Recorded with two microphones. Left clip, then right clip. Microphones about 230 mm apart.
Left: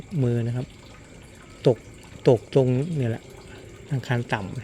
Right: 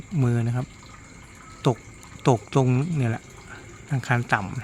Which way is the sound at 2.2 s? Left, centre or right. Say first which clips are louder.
Left 3 dB; centre.